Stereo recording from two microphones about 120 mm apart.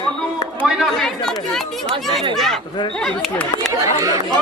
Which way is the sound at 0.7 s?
5° left (ahead or behind).